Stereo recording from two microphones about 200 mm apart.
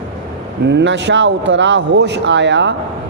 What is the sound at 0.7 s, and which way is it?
A man's voice, 60° right (ahead or behind).